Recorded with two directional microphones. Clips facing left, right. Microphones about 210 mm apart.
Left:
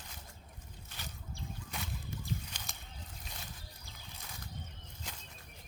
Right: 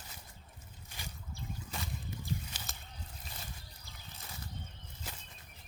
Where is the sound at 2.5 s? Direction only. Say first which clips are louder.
Right 1 dB; 5° right (ahead or behind).